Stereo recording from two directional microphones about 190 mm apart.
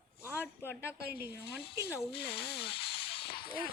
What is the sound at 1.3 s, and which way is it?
Speech, 60° left (ahead or behind).